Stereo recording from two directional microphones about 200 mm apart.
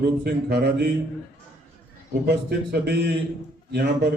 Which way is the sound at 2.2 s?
55° right (ahead or behind).